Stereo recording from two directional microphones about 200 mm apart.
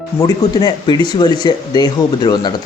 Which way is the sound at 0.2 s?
20° left (ahead or behind).